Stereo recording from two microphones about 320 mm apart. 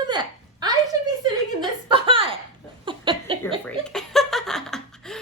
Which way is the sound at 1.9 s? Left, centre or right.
Centre.